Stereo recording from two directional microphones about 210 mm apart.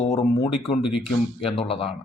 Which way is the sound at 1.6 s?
25° left (ahead or behind).